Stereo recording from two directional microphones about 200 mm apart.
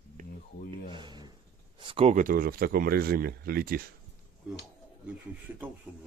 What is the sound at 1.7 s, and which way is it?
Speech, 25° right (ahead or behind).